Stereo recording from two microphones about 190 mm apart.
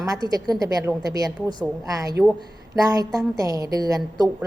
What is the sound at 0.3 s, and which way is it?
A woman's voice, 20° right (ahead or behind).